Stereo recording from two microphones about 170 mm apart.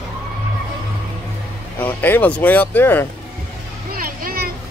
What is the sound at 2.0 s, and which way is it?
Speech, 10° left (ahead or behind).